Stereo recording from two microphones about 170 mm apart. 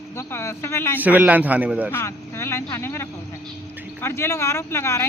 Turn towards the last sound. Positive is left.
turn(degrees=15)  # may be behind; listen again after turning